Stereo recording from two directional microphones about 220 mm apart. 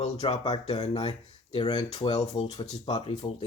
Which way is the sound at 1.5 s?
20° left (ahead or behind).